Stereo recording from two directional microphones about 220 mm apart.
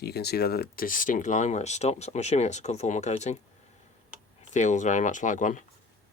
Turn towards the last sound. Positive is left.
turn(degrees=35)  # may be behind; listen again after turning